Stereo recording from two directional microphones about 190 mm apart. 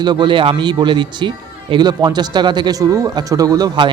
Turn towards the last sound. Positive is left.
turn(degrees=-20)  # may be behind; listen again after turning